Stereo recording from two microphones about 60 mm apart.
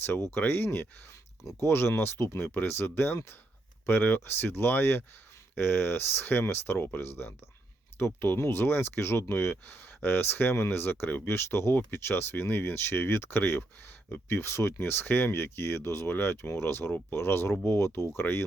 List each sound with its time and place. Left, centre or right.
0.0 s speech: left